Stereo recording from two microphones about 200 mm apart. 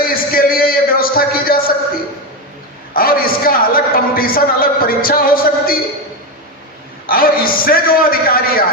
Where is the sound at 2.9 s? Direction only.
45° left (ahead or behind).